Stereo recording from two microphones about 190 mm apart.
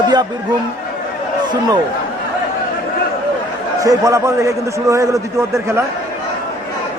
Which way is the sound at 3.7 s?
15° right (ahead or behind).